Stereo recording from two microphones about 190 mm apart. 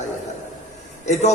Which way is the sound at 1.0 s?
35° left (ahead or behind).